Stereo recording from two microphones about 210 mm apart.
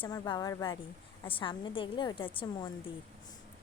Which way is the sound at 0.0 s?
20° left (ahead or behind).